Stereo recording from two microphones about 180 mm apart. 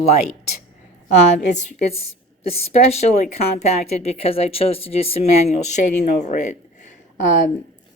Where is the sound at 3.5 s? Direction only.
40° left (ahead or behind).